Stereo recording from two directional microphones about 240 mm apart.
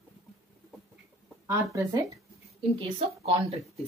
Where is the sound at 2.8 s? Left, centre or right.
Right.